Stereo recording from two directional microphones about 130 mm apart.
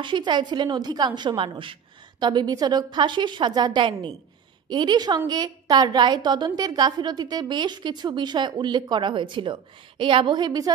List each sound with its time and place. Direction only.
0.0 s a woman's voice: 35° right (ahead or behind)